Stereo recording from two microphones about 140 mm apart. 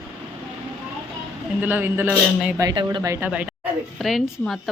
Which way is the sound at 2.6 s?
35° right (ahead or behind).